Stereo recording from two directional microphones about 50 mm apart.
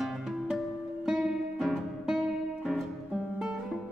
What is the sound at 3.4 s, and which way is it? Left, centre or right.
Music, centre.